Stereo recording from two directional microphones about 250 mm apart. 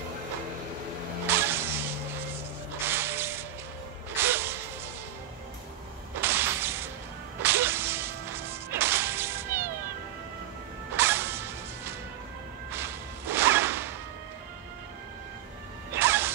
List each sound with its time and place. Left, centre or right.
1.2 s vehicle: centre
2.8 s spray: centre
4.2 s music: centre
6.2 s whip: centre
11.0 s music: centre
12.7 s whip: centre
15.9 s music: centre